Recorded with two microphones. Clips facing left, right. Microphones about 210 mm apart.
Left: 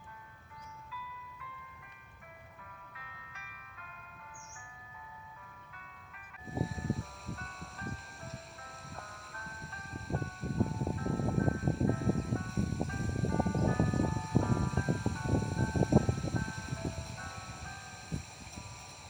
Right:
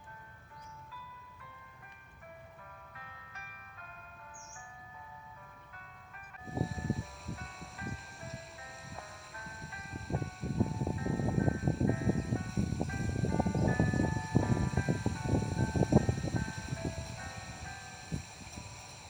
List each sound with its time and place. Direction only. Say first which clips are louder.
2.9 s music: right 1 dB; 40° right (ahead or behind)
6.4 s music: even; centre (ahead or behind)